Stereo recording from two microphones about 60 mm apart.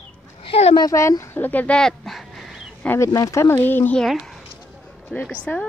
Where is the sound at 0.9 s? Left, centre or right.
Left.